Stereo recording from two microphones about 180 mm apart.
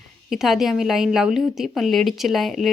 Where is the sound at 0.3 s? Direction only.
Centre (ahead or behind).